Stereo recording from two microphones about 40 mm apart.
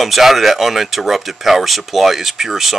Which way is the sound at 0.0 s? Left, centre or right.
Centre.